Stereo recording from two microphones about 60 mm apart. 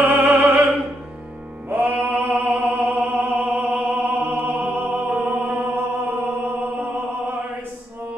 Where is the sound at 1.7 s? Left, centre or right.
Right.